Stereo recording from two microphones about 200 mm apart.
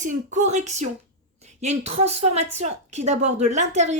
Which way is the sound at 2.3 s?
35° right (ahead or behind).